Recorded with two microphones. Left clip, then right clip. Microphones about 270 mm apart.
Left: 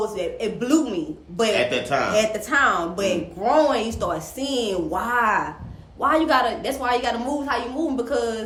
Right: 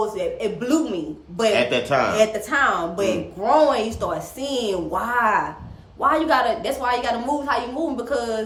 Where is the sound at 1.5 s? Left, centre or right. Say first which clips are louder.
Right 3 dB; right.